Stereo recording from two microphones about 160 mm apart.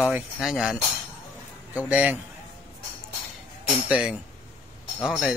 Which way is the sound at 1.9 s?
10° right (ahead or behind).